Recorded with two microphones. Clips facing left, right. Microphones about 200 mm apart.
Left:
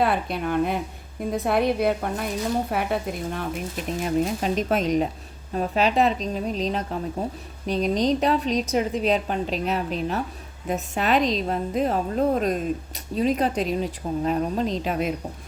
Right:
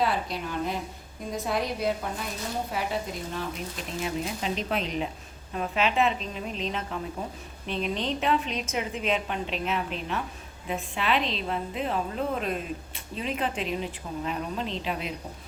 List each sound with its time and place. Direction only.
0.0 s speech: 55° left (ahead or behind)
4.0 s a woman's voice: 45° left (ahead or behind)